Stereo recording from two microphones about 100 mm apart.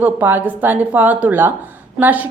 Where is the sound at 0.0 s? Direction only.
20° right (ahead or behind).